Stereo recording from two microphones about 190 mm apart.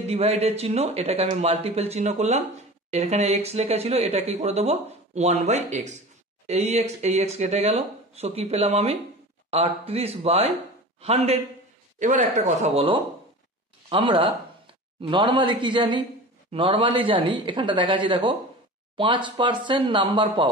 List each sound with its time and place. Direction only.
0.0 s speech: 35° right (ahead or behind)